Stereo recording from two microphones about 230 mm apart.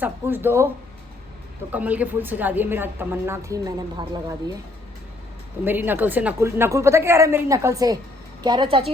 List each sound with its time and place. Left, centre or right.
0.0 s a woman's voice: centre
1.7 s a woman's voice: centre
5.6 s a woman's voice: centre